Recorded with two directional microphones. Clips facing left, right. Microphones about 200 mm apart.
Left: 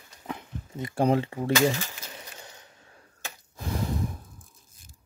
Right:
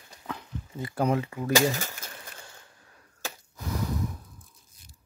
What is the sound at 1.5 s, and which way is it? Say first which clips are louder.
Speech: even; 45° right (ahead or behind).